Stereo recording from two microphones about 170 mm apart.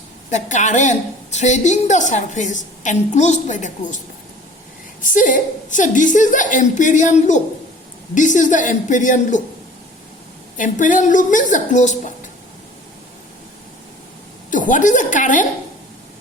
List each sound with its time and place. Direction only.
0.3 s a woman's voice: 45° left (ahead or behind)
10.6 s a woman's voice: 50° left (ahead or behind)
14.5 s a woman's voice: 50° left (ahead or behind)